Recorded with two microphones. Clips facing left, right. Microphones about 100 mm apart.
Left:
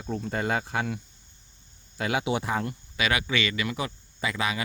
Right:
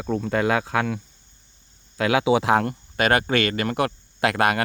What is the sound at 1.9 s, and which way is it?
Speech, 90° right.